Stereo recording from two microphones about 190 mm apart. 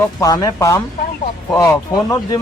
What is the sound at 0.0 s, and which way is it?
Speech, 15° left (ahead or behind).